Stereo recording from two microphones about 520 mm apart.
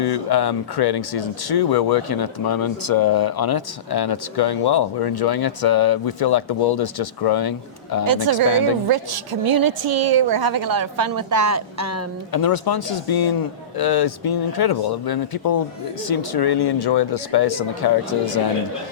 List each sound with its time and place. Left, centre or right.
0.0 s speech: left
8.0 s a woman's voice: right
12.3 s speech: left